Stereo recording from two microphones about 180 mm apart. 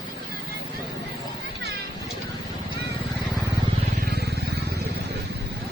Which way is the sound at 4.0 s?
60° right (ahead or behind).